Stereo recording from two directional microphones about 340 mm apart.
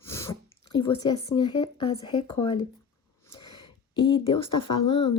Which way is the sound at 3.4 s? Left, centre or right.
Centre.